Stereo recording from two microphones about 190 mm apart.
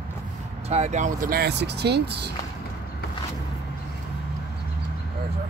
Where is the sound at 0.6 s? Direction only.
35° right (ahead or behind); by 2.3 s 60° right (ahead or behind).